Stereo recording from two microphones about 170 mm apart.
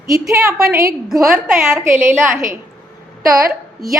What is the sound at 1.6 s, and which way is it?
Speech, 15° right (ahead or behind).